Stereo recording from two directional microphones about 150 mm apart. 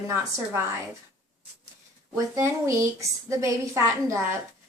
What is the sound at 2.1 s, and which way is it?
A woman's voice, 20° right (ahead or behind).